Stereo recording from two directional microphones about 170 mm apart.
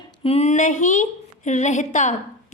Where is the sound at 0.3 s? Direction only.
40° left (ahead or behind).